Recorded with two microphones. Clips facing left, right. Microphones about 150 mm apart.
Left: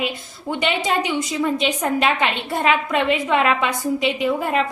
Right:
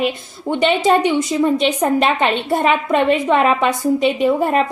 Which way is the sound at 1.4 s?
30° right (ahead or behind).